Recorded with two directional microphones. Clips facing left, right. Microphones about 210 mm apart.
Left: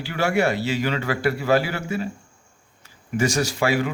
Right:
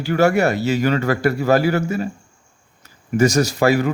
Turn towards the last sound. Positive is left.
turn(degrees=-40)  # may be behind; listen again after turning